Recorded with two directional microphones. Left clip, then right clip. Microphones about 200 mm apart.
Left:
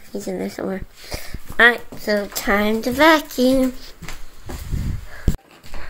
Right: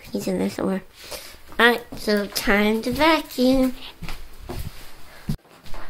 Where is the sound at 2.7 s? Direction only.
20° left (ahead or behind).